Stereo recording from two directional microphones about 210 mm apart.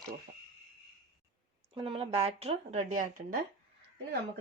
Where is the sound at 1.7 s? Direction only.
25° right (ahead or behind).